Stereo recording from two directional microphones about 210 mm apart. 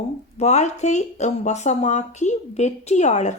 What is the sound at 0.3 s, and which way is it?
Speech, 30° left (ahead or behind).